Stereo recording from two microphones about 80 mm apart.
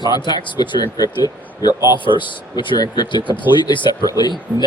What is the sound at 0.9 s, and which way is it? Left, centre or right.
Speech, left.